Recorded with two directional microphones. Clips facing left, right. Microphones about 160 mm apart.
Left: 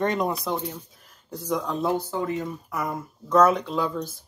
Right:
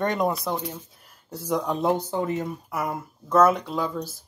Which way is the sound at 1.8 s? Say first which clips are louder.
Right 2 dB; 20° right (ahead or behind).